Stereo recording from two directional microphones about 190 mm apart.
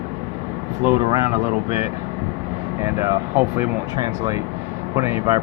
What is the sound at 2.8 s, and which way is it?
Speech, 15° right (ahead or behind).